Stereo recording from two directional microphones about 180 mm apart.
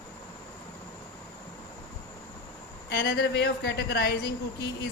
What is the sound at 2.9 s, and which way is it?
A woman's voice, 60° left (ahead or behind).